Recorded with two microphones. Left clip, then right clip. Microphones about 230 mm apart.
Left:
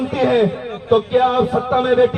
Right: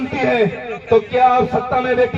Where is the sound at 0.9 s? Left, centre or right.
Right.